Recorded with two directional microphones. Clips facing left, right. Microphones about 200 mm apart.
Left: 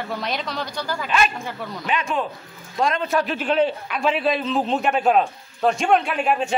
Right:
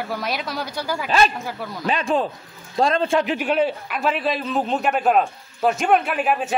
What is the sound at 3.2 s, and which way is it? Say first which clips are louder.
A man's voice: even; 10° right (ahead or behind).